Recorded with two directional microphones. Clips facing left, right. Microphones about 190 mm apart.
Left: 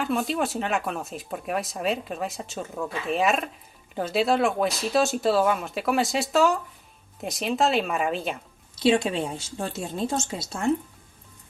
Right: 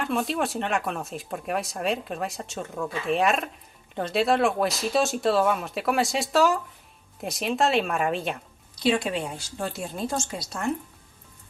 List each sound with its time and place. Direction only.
0.0 s speech: centre (ahead or behind)
8.7 s speech: 25° left (ahead or behind)